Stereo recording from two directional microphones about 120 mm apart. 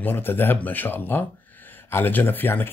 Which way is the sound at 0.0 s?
20° left (ahead or behind).